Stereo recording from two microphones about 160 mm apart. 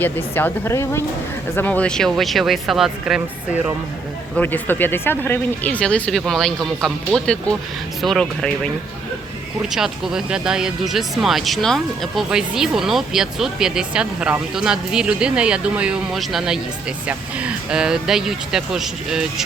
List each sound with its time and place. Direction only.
0.0 s speech: 10° left (ahead or behind)
4.4 s speech: 10° left (ahead or behind)
9.7 s speech: 5° right (ahead or behind)